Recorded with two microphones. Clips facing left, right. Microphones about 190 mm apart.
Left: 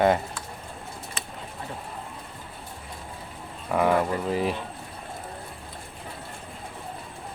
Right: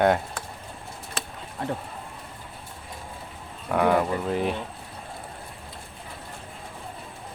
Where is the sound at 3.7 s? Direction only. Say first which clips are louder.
Right 1 dB; centre (ahead or behind).